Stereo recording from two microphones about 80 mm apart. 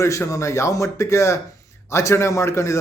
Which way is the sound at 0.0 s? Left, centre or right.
Left.